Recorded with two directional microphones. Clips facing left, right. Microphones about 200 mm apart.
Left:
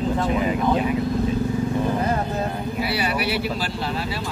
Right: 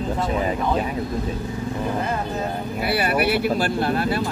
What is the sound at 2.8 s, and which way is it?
Speech, 55° right (ahead or behind).